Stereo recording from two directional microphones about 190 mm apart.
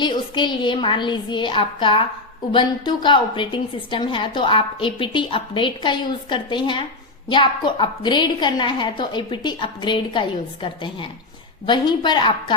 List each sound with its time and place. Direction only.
0.0 s a woman's voice: 25° left (ahead or behind)